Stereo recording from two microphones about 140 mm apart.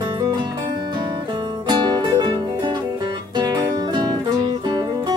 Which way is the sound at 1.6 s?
30° right (ahead or behind).